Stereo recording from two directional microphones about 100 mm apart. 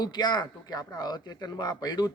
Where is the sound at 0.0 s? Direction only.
45° left (ahead or behind).